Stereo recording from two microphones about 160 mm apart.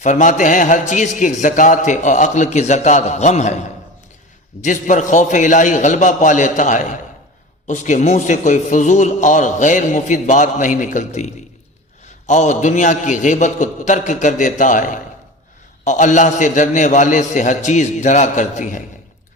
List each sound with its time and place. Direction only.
0.0 s a man's voice: 50° left (ahead or behind)